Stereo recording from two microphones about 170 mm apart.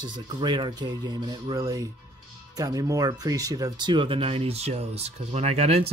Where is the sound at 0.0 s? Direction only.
25° right (ahead or behind).